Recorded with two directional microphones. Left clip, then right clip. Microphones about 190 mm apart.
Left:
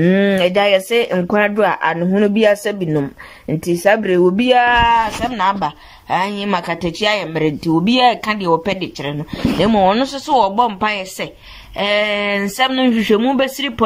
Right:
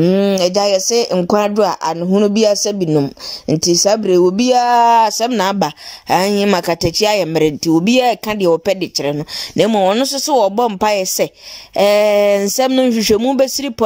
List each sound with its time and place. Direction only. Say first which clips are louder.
0.0 s speech: right 1 dB; 15° right (ahead or behind); by 4.9 s 35° right (ahead or behind)
4.9 s speech: right 4 dB; 60° right (ahead or behind)